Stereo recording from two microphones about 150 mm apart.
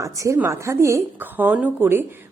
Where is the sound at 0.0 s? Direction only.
20° right (ahead or behind).